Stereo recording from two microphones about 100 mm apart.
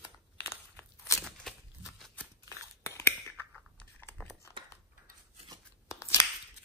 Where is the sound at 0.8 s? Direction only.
30° left (ahead or behind).